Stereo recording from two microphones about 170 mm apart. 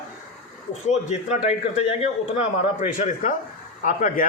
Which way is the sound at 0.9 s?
40° left (ahead or behind).